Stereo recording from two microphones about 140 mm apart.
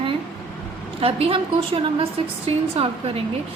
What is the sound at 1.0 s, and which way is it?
A woman's voice, 40° right (ahead or behind).